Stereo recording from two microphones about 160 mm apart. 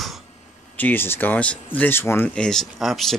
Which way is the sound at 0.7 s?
10° left (ahead or behind).